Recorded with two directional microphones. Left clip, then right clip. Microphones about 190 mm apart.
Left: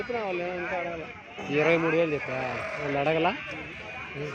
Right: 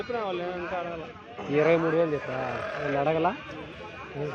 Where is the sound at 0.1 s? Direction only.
25° left (ahead or behind).